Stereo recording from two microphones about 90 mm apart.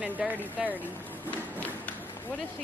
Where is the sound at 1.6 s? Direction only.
20° left (ahead or behind).